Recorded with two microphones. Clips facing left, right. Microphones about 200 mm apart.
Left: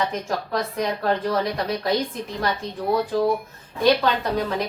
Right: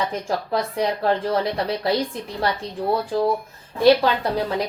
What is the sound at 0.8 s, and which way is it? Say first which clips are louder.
A woman's voice: right 2 dB; 30° right (ahead or behind).